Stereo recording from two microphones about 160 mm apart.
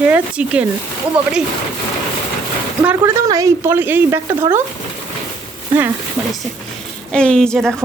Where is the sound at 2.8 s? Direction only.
15° right (ahead or behind).